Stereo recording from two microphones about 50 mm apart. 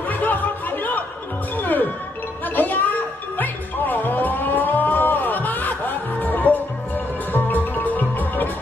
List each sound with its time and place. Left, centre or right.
0.1 s music: left